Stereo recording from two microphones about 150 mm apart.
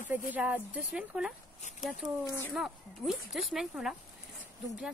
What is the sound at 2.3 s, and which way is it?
Speech, 15° left (ahead or behind).